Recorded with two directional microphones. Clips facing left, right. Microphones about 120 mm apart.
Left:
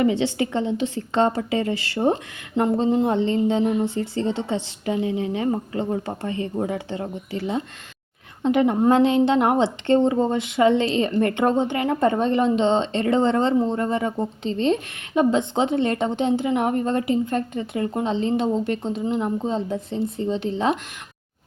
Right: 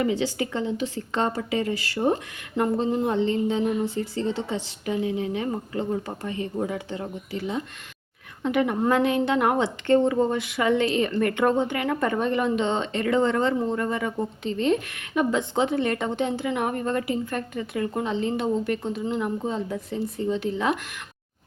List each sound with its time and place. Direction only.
0.0 s a woman's voice: 25° left (ahead or behind)